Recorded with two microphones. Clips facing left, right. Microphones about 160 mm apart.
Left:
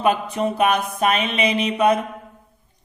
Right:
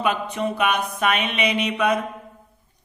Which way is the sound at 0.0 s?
40° left (ahead or behind).